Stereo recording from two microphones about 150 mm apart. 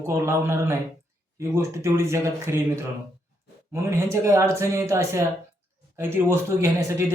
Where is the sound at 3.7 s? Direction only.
20° right (ahead or behind).